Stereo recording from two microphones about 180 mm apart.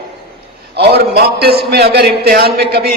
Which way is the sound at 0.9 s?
60° right (ahead or behind).